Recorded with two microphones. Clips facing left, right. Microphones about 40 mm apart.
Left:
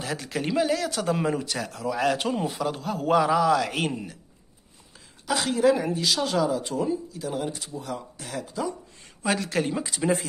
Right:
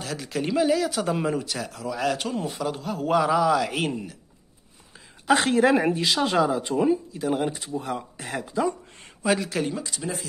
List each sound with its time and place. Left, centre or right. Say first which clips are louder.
0.0 s speech: even; centre
5.2 s a woman's voice: right 3 dB; right; by 8.6 s centre
9.2 s speech: right 1 dB; centre
9.8 s speech: left 2 dB; centre